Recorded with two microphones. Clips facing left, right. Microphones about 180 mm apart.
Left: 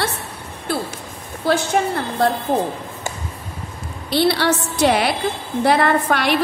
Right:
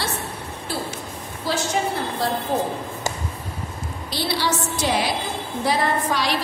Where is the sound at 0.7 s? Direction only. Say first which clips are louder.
Left 5 dB; 60° left (ahead or behind).